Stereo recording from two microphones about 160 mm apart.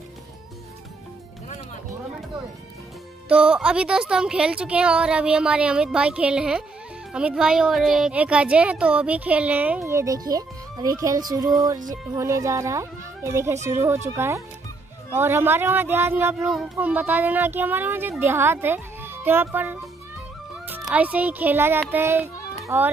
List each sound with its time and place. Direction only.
3.3 s a woman's voice: 5° right (ahead or behind)
20.8 s speech: 10° right (ahead or behind)